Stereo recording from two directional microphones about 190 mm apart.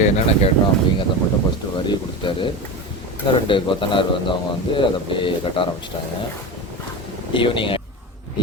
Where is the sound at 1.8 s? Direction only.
25° left (ahead or behind).